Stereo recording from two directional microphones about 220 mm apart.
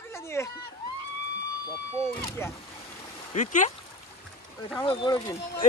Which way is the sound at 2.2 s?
10° left (ahead or behind).